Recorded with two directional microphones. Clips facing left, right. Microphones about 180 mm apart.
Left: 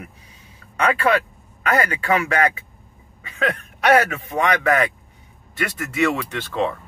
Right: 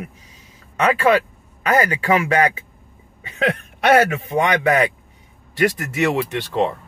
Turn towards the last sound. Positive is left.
turn(degrees=-20)  # may be behind; listen again after turning